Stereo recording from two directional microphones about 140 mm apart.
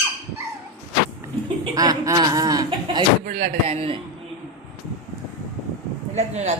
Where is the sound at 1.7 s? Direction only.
25° right (ahead or behind).